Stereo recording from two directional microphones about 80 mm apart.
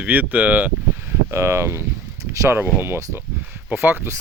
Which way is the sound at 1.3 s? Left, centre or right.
Right.